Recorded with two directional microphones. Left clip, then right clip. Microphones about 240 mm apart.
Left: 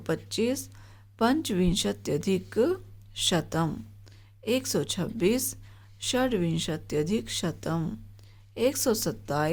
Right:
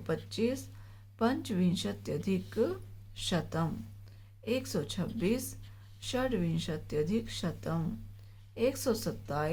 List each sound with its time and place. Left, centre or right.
0.3 s speech: left